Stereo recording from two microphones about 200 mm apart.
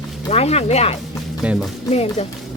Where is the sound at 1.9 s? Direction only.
30° left (ahead or behind).